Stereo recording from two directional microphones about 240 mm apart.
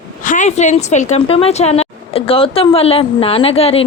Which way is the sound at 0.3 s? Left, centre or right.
Left.